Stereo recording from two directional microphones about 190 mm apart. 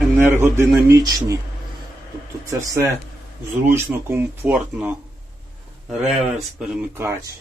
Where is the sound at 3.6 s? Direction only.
10° right (ahead or behind).